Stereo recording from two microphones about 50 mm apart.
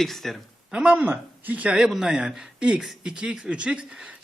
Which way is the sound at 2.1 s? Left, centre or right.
Centre.